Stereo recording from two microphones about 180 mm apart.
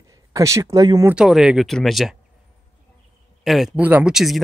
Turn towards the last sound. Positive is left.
turn(degrees=0)  # may be behind; listen again after turning